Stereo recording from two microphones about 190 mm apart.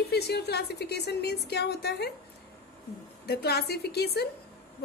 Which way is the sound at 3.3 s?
55° left (ahead or behind).